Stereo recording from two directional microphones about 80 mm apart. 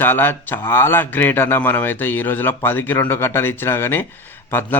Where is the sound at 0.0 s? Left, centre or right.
Left.